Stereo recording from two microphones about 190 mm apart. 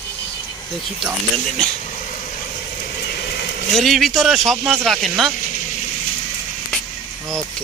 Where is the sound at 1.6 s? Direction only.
5° left (ahead or behind).